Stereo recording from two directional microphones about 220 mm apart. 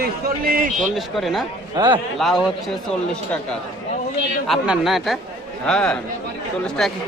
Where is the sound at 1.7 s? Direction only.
20° right (ahead or behind).